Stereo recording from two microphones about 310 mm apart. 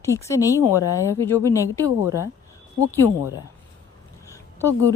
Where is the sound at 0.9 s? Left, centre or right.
Centre.